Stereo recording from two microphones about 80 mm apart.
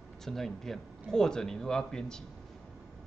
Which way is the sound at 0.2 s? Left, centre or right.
Centre.